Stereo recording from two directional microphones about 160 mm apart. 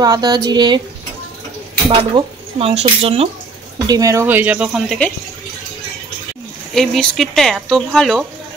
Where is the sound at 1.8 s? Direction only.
35° right (ahead or behind).